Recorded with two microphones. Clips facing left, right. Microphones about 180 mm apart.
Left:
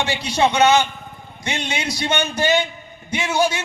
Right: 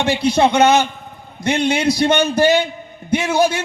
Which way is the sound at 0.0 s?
55° right (ahead or behind).